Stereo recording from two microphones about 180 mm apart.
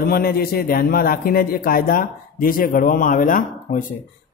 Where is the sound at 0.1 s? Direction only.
55° left (ahead or behind).